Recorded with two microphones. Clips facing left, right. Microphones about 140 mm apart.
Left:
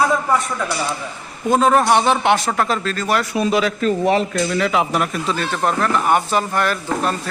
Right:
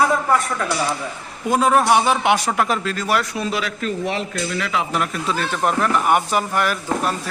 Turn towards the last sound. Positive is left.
turn(degrees=-10)  # may be behind; listen again after turning